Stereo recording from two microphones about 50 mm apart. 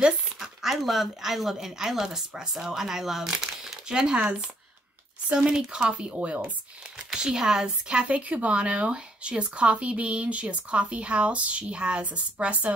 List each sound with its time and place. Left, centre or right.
0.0 s speech: centre
6.1 s speech: right
7.1 s speech: centre